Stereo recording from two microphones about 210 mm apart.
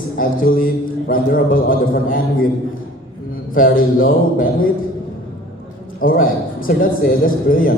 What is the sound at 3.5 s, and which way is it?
A man's voice, 40° left (ahead or behind).